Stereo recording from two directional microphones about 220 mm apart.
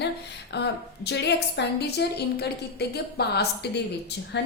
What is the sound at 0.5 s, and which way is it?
A woman's voice, 50° left (ahead or behind).